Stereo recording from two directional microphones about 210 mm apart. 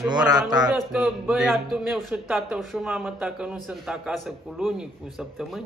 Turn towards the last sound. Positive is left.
turn(degrees=0)  # may be behind; listen again after turning